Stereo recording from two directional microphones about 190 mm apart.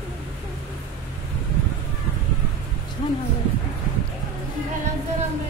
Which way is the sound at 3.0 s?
25° left (ahead or behind).